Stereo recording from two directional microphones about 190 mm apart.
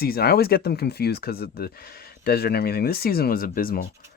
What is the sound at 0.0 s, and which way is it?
Speech, 55° left (ahead or behind).